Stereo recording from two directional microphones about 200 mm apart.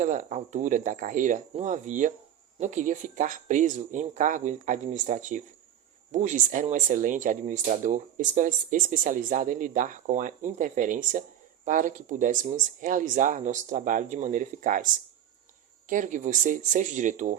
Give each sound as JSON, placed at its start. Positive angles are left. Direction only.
{"t": 0.0, "sound": "speech", "side_deg": -40}
{"t": 15.9, "sound": "speech", "side_deg": -40}